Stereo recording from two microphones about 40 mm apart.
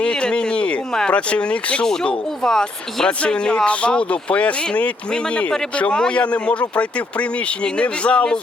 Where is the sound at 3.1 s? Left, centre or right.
Left.